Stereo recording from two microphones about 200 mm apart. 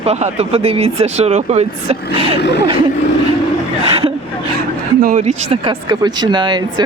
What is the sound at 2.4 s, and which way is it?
Speech, 55° left (ahead or behind).